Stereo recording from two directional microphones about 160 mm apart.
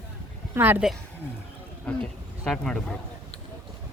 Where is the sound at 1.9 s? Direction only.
5° left (ahead or behind).